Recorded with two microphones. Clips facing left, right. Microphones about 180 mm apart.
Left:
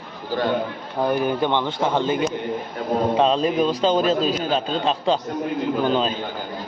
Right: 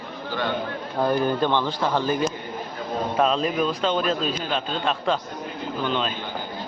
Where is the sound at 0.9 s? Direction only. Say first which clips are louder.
Left 1 dB; 10° left (ahead or behind).